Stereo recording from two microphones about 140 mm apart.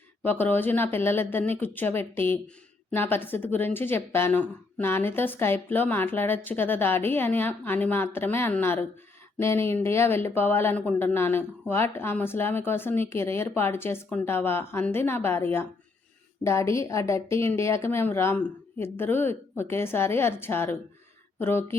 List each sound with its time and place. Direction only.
0.3 s a woman's voice: 15° left (ahead or behind)